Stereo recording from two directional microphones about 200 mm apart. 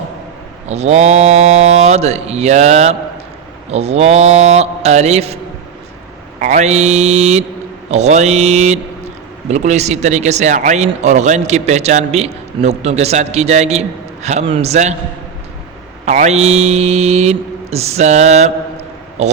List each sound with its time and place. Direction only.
0.7 s a man's voice: 35° right (ahead or behind)
6.4 s a man's voice: 35° right (ahead or behind)
16.0 s a man's voice: 35° right (ahead or behind)